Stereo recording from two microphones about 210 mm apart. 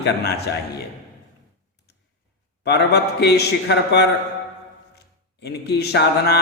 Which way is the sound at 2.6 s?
50° left (ahead or behind).